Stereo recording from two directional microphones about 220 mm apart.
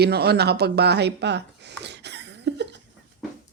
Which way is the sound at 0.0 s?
45° right (ahead or behind).